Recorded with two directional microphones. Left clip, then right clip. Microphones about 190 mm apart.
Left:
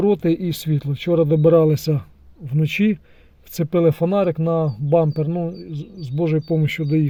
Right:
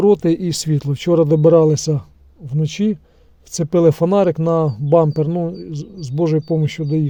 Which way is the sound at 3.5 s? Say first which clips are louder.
Right 4 dB; 15° right (ahead or behind).